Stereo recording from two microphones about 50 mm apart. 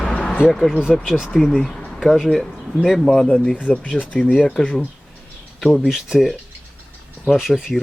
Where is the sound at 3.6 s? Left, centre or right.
Left.